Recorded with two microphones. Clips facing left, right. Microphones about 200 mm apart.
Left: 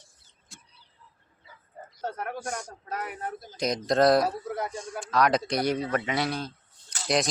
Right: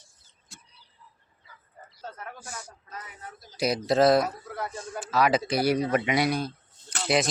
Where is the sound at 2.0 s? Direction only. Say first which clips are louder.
Left 8 dB; 70° left (ahead or behind).